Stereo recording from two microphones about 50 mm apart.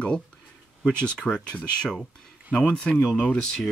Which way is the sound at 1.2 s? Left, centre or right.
Centre.